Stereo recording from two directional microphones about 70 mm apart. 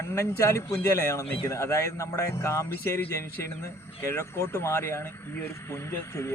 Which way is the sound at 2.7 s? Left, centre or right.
Left.